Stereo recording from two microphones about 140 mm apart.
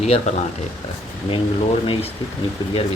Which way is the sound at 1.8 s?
35° left (ahead or behind).